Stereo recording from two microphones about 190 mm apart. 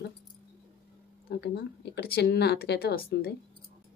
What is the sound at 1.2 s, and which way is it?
Speech, 60° left (ahead or behind).